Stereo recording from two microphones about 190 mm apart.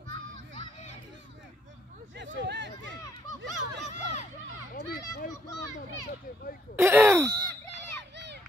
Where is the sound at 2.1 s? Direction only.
70° right (ahead or behind).